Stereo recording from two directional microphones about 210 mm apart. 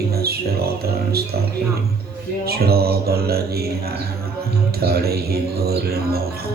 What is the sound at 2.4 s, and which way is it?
A man's voice, 45° right (ahead or behind).